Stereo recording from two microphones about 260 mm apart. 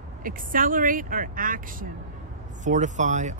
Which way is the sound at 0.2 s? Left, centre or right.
Right.